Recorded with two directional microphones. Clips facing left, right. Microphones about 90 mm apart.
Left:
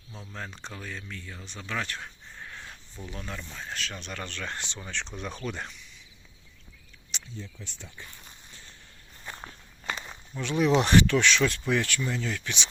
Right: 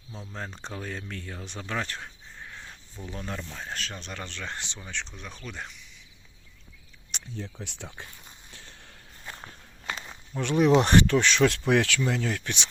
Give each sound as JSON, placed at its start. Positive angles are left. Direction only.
{"t": 0.1, "sound": "speech", "side_deg": -25}
{"t": 1.7, "sound": "speech", "side_deg": -30}
{"t": 2.4, "sound": "a sound", "side_deg": -10}
{"t": 3.1, "sound": "speech", "side_deg": -35}
{"t": 3.9, "sound": "speech", "side_deg": -20}
{"t": 5.5, "sound": "speech", "side_deg": 0}
{"t": 7.1, "sound": "speech", "side_deg": -65}
{"t": 7.6, "sound": "speech", "side_deg": -90}
{"t": 9.8, "sound": "walk", "side_deg": 0}
{"t": 10.3, "sound": "speech", "side_deg": -45}
{"t": 11.4, "sound": "speech", "side_deg": -70}
{"t": 12.0, "sound": "speech", "side_deg": -60}